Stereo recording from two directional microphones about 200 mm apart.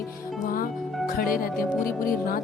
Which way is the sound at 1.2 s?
45° left (ahead or behind).